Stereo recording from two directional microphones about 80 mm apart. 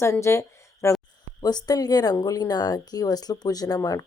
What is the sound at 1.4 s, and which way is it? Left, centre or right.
Speech, left.